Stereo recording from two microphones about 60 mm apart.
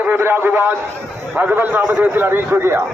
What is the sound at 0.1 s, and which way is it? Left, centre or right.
A man's voice, right.